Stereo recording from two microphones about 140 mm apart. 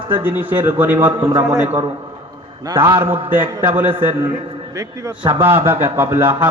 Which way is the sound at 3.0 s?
15° right (ahead or behind).